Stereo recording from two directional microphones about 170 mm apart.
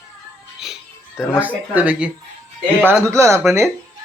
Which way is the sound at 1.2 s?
10° right (ahead or behind).